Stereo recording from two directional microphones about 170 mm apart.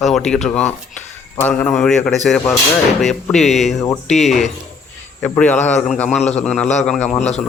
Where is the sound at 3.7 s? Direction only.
15° left (ahead or behind).